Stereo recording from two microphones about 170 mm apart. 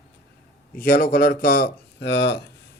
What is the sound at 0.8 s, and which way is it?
Speech, 55° left (ahead or behind).